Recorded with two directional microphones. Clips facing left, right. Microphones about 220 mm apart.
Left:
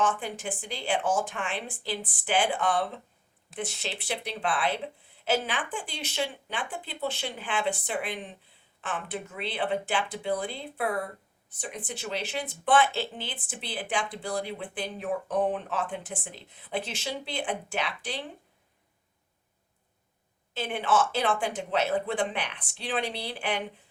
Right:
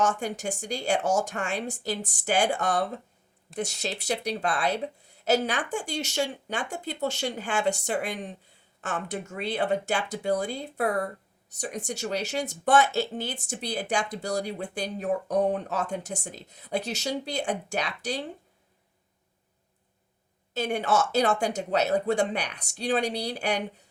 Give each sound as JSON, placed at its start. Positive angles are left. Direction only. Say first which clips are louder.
{"t": 0.0, "sound": "speech", "louder": "right 2 dB", "side_deg": -40}
{"t": 20.5, "sound": "speech", "louder": "right 2 dB", "side_deg": -40}